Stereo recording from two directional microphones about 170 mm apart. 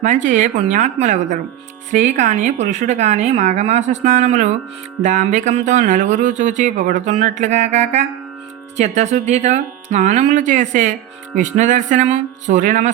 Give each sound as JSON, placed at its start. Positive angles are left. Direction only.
{"t": 0.0, "sound": "speech", "side_deg": -45}